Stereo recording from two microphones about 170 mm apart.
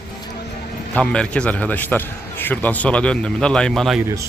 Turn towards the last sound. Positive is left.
turn(degrees=0)  # may be behind; listen again after turning